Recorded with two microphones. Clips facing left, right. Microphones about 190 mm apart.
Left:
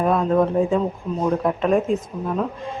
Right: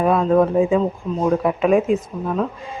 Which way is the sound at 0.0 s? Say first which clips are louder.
Right 3 dB; centre (ahead or behind).